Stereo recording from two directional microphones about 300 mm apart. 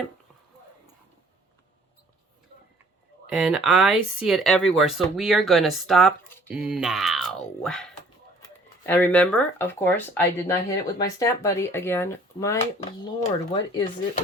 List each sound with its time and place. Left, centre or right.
3.2 s speech: centre
8.9 s speech: centre
12.8 s speech: left